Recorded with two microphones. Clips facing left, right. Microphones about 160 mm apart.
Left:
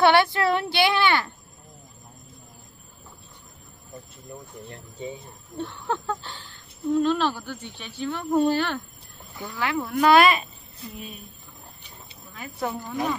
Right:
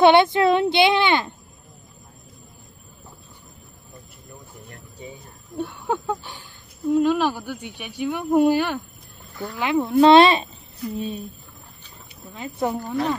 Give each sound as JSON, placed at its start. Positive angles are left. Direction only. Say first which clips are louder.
{"t": 0.0, "sound": "speech", "louder": "right 4 dB", "side_deg": -20}
{"t": 4.3, "sound": "speech", "louder": "left 4 dB", "side_deg": 25}
{"t": 5.6, "sound": "speech", "louder": "right 3 dB", "side_deg": -10}
{"t": 12.4, "sound": "speech", "louder": "right 5 dB", "side_deg": -25}